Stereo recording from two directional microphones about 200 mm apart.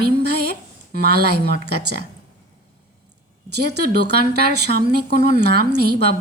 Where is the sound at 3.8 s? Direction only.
55° right (ahead or behind).